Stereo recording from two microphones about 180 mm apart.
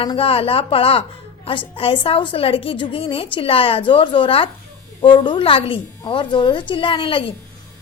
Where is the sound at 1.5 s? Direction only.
30° left (ahead or behind).